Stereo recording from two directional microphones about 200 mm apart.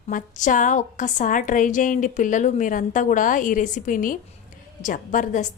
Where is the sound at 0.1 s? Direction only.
40° left (ahead or behind).